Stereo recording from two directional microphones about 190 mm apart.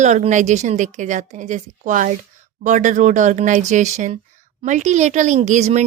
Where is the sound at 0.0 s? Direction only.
40° right (ahead or behind).